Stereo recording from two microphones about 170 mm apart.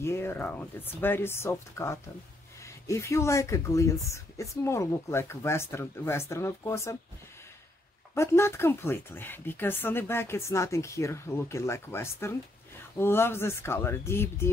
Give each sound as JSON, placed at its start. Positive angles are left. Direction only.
{"t": 0.0, "sound": "speech", "side_deg": 15}
{"t": 8.1, "sound": "speech", "side_deg": 15}